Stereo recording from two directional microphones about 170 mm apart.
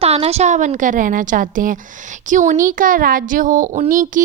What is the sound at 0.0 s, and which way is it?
A woman's voice, 35° right (ahead or behind).